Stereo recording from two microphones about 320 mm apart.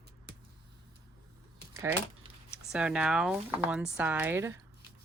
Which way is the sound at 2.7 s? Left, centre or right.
Centre.